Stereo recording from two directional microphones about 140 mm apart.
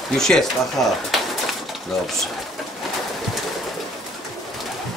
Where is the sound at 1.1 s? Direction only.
Centre (ahead or behind).